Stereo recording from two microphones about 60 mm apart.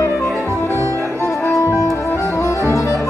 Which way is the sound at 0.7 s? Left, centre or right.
Right.